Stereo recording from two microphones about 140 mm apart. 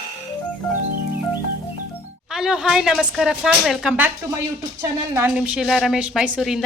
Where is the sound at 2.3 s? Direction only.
5° right (ahead or behind).